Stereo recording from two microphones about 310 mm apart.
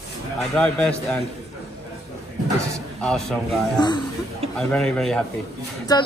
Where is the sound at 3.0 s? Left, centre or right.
Centre.